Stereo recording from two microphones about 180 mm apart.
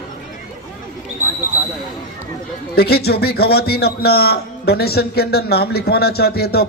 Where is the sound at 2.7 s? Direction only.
60° left (ahead or behind).